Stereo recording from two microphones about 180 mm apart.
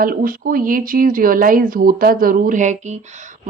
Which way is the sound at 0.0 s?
50° right (ahead or behind).